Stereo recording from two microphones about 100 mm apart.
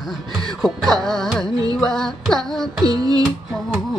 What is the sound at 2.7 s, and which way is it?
Music, 40° right (ahead or behind).